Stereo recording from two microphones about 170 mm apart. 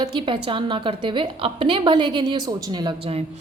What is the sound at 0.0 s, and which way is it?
A woman's voice, 25° right (ahead or behind).